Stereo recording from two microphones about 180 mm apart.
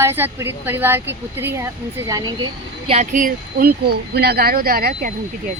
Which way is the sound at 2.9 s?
45° right (ahead or behind).